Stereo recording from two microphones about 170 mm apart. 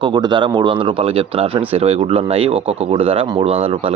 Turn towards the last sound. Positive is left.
turn(degrees=-35)  # may be behind; listen again after turning